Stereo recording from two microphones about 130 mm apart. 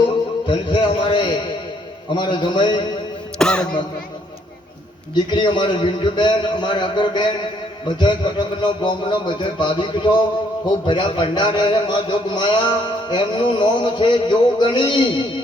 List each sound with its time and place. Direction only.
0.4 s a man's voice: 40° left (ahead or behind)
3.3 s speech: 5° left (ahead or behind)
5.1 s a man's voice: 35° left (ahead or behind)